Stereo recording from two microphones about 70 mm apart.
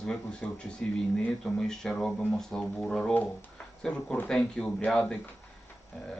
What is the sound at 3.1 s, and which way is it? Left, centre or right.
Speech, left.